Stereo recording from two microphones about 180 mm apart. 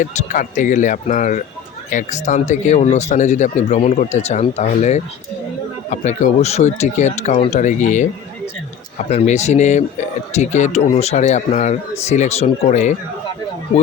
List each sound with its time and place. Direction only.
0.0 s speech: 40° left (ahead or behind)
9.0 s speech: 40° left (ahead or behind)